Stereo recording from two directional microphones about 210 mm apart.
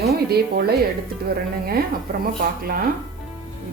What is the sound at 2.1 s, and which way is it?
Speech, 50° right (ahead or behind).